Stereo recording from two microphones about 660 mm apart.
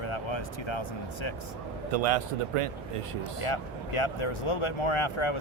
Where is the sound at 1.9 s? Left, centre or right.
Right.